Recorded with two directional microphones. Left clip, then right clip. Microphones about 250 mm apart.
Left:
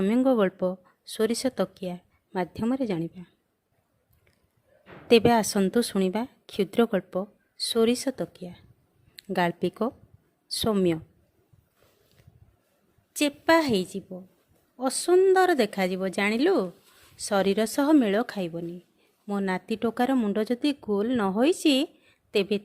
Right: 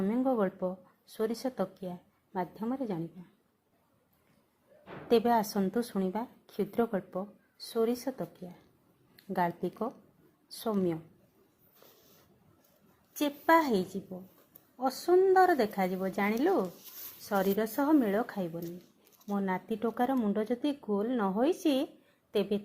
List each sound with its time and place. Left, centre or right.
0.0 s speech: left
5.0 s speech: left
13.1 s a woman's voice: left